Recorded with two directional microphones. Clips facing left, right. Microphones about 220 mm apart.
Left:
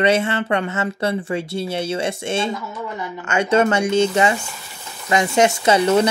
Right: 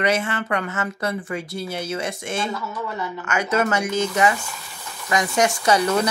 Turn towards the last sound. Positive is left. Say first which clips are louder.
# left 4 dB
turn(degrees=25)  # may be behind; listen again after turning